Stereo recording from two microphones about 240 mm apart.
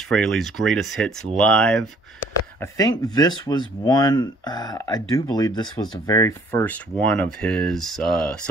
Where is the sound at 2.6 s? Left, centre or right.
Centre.